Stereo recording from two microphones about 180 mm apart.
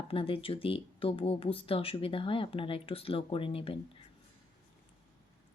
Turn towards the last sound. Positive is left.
turn(degrees=30)  # may be behind; listen again after turning